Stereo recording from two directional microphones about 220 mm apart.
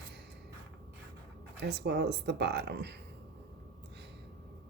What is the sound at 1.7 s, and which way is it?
Speech, 50° right (ahead or behind).